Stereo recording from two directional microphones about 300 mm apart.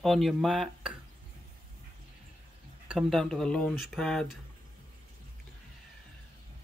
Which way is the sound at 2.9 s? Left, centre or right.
Centre.